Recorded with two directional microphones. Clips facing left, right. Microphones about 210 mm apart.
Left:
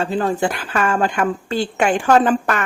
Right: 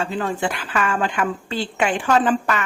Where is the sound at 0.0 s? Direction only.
40° left (ahead or behind).